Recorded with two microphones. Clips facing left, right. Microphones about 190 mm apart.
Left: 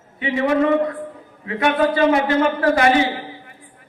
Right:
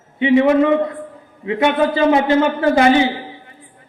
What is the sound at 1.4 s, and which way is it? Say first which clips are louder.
A man's voice: right 2 dB; 20° right (ahead or behind).